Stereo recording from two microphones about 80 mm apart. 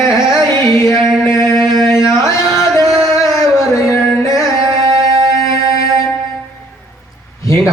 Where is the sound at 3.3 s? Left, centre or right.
Left.